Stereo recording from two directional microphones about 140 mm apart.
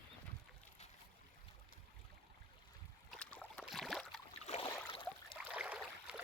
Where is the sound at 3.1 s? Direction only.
5° left (ahead or behind).